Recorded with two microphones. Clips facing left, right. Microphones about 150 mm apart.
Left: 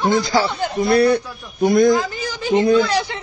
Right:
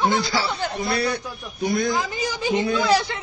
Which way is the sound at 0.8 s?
55° left (ahead or behind).